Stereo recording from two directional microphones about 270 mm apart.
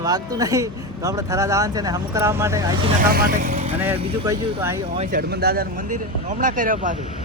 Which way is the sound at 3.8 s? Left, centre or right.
Centre.